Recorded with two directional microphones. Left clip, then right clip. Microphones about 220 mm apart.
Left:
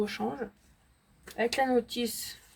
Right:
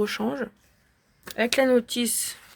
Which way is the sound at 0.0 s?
45° right (ahead or behind).